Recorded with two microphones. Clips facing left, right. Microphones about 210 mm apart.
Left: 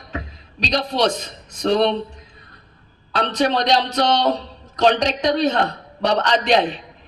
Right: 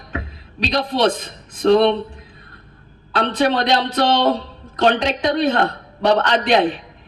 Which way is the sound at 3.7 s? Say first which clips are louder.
Right 1 dB; 60° right (ahead or behind).